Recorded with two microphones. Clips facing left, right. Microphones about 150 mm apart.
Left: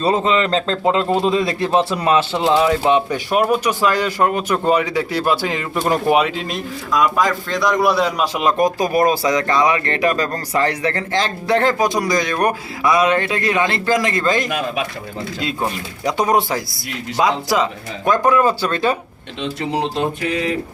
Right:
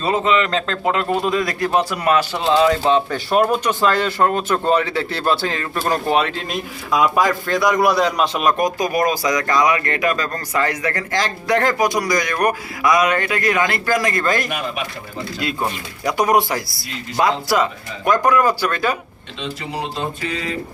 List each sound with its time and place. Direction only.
0.0 s speech: 35° left (ahead or behind); by 6.6 s 5° left (ahead or behind)
6.9 s a man's voice: 10° right (ahead or behind); by 8.4 s 5° left (ahead or behind)
8.4 s speech: 25° left (ahead or behind)
17.2 s speech: 20° left (ahead or behind)
20.0 s a sound: 60° left (ahead or behind)